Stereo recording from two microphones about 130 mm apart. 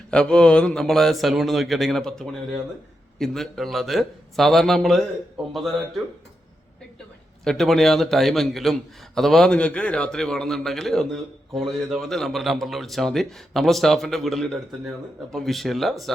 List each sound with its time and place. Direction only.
0.1 s a man's voice: 5° left (ahead or behind)
7.4 s a man's voice: centre (ahead or behind)